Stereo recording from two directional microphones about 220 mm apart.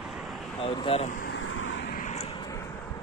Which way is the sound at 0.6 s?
25° left (ahead or behind).